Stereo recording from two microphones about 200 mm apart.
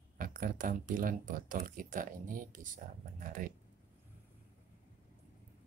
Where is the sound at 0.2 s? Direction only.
45° right (ahead or behind).